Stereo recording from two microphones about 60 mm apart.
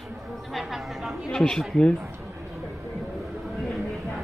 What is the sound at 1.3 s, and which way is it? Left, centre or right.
Speech, centre.